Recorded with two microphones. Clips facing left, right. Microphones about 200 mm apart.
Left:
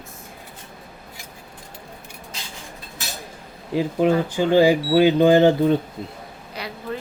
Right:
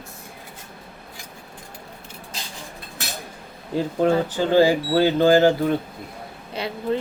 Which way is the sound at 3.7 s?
10° left (ahead or behind).